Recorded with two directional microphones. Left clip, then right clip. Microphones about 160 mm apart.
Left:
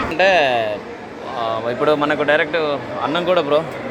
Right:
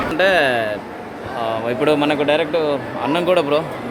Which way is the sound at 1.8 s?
30° right (ahead or behind).